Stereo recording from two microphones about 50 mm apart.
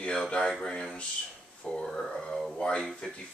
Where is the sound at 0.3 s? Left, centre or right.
Centre.